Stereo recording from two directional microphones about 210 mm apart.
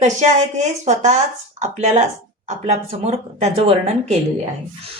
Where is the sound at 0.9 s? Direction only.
35° right (ahead or behind).